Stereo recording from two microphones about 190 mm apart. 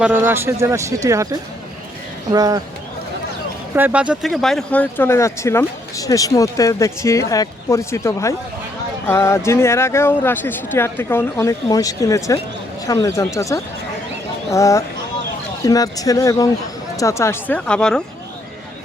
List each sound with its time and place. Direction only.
0.0 s speech: 10° right (ahead or behind)
3.8 s speech: 10° right (ahead or behind)